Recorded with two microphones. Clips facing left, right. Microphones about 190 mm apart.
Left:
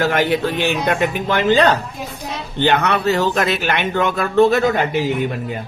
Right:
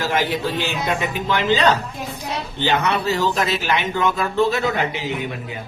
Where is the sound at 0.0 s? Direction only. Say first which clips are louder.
Left 4 dB; 60° left (ahead or behind).